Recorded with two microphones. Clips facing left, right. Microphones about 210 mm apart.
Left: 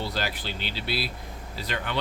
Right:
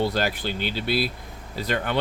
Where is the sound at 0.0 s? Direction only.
50° right (ahead or behind).